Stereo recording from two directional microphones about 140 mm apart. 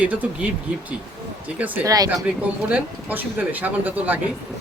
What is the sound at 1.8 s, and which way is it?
Speech, 25° right (ahead or behind).